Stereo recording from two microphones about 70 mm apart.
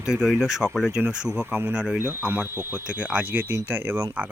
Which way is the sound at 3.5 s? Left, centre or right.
Right.